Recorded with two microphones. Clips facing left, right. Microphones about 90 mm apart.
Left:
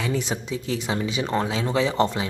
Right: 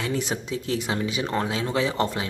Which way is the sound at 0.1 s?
15° right (ahead or behind).